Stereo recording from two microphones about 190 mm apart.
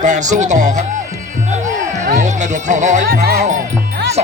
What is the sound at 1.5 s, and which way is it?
Music, 40° right (ahead or behind).